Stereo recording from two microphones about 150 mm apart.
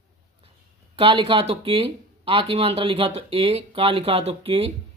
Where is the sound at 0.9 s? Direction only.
35° right (ahead or behind).